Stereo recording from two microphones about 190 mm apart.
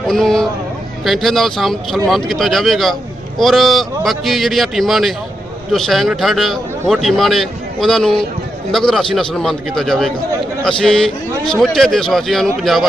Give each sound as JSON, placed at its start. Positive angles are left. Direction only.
{"t": 0.1, "sound": "a man's voice", "side_deg": 0}